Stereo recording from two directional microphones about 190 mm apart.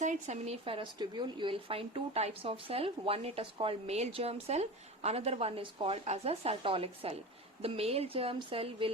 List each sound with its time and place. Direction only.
0.0 s speech: 40° right (ahead or behind)